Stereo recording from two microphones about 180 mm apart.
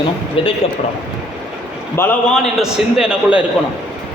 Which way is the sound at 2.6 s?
5° right (ahead or behind).